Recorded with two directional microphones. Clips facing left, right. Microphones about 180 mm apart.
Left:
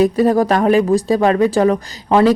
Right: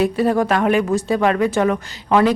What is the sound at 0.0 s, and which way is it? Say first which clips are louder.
Speech: left 4 dB; 40° left (ahead or behind).